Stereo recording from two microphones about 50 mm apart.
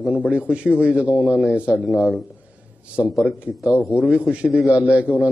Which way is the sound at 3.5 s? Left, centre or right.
Right.